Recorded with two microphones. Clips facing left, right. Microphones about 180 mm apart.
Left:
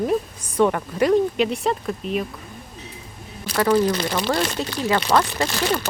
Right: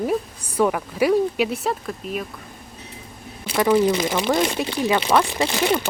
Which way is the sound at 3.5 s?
10° right (ahead or behind).